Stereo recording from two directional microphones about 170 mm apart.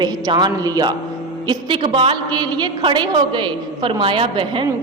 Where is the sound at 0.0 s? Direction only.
25° right (ahead or behind).